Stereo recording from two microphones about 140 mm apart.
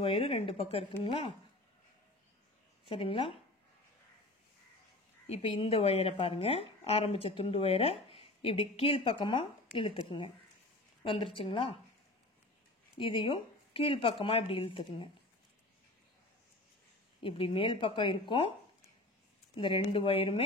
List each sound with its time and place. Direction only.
0.0 s speech: 40° left (ahead or behind)
2.9 s speech: 40° left (ahead or behind)
5.2 s speech: 45° left (ahead or behind)
12.9 s speech: 40° left (ahead or behind)
17.2 s speech: 40° left (ahead or behind)
19.5 s speech: 40° left (ahead or behind)